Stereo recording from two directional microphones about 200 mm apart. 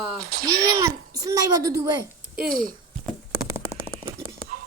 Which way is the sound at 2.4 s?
45° right (ahead or behind).